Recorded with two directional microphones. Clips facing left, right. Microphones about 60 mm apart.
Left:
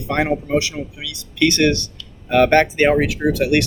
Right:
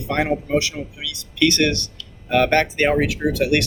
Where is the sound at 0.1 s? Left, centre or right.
Left.